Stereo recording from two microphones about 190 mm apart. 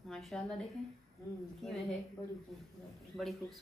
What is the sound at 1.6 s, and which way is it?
Speech, centre (ahead or behind).